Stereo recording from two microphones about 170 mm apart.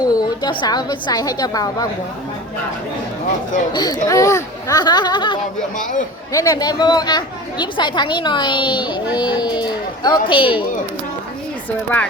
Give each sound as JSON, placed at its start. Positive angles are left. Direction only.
{"t": 0.0, "sound": "a woman's voice", "side_deg": 25}
{"t": 3.7, "sound": "a woman's voice", "side_deg": 25}
{"t": 5.7, "sound": "a man's voice", "side_deg": 50}
{"t": 6.3, "sound": "a woman's voice", "side_deg": 20}